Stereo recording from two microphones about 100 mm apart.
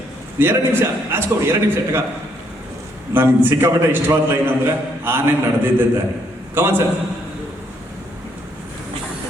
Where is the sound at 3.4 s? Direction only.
25° right (ahead or behind).